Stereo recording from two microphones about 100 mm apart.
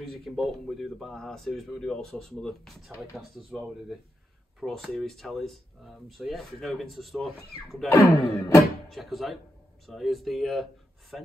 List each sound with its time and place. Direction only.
0.0 s speech: centre (ahead or behind)
7.9 s speech: 30° left (ahead or behind)
8.5 s music: centre (ahead or behind)
9.8 s speech: centre (ahead or behind)